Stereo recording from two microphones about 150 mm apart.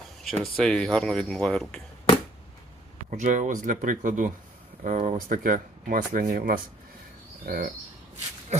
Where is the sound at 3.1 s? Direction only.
55° right (ahead or behind).